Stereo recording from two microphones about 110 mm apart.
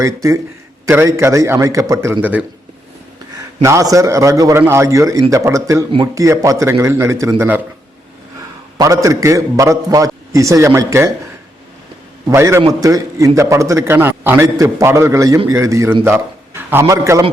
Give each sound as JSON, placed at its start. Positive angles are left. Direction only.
{"t": 0.0, "sound": "a man's voice", "side_deg": -30}
{"t": 3.3, "sound": "a man's voice", "side_deg": -30}
{"t": 8.8, "sound": "a man's voice", "side_deg": -30}
{"t": 12.3, "sound": "a man's voice", "side_deg": -25}